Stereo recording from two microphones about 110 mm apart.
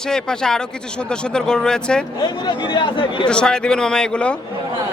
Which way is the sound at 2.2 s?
40° left (ahead or behind).